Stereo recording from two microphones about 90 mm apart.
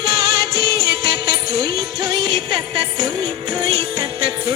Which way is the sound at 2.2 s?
Centre (ahead or behind).